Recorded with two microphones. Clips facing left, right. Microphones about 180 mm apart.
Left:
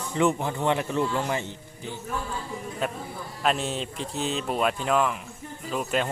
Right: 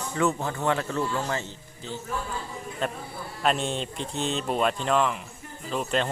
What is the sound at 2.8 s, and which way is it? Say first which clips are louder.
Speech: right 1 dB; 5° left (ahead or behind).